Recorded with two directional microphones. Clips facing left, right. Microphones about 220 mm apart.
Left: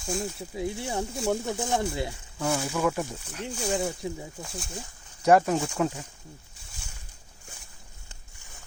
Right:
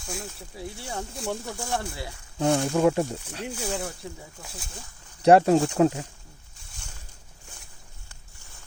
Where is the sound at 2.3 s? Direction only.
25° right (ahead or behind).